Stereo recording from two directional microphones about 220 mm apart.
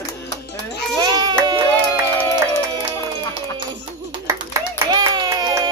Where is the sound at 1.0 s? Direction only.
20° right (ahead or behind).